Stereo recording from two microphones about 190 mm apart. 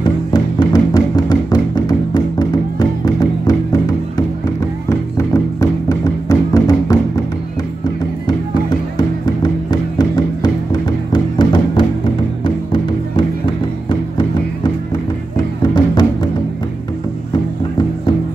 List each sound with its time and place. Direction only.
0.0 s music: 20° left (ahead or behind)
4.8 s music: 15° left (ahead or behind)
8.3 s music: 20° left (ahead or behind)